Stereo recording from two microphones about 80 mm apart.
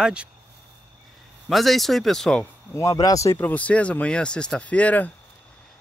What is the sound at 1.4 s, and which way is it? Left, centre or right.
Speech, centre.